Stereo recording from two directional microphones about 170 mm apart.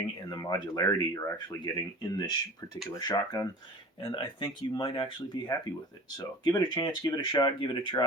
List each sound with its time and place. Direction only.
0.2 s speech: 20° left (ahead or behind)